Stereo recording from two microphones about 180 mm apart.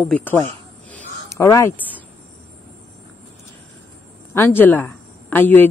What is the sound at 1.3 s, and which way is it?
Speech, 15° left (ahead or behind).